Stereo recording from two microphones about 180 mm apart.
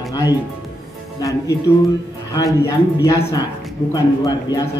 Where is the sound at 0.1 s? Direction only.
20° left (ahead or behind).